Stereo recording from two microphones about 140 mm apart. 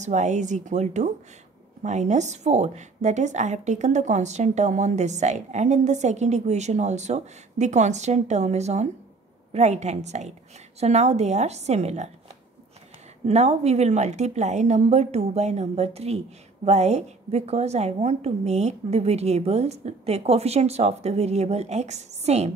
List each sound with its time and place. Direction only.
0.0 s a woman's voice: 60° right (ahead or behind)
13.2 s a woman's voice: 50° right (ahead or behind)